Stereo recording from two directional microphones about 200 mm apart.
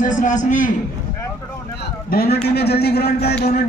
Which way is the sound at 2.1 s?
50° left (ahead or behind).